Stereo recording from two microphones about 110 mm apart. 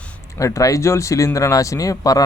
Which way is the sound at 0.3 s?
30° left (ahead or behind).